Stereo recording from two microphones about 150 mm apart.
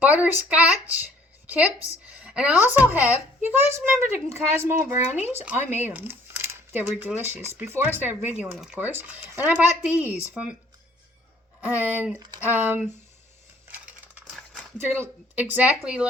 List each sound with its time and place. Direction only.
0.0 s a woman's voice: 10° right (ahead or behind)
11.6 s speech: 10° right (ahead or behind)
14.8 s speech: 15° right (ahead or behind)